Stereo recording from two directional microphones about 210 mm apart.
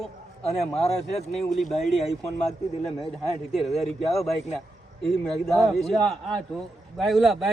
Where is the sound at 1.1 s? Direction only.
30° left (ahead or behind).